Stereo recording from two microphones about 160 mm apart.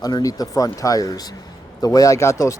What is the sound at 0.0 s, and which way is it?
Speech, 20° left (ahead or behind).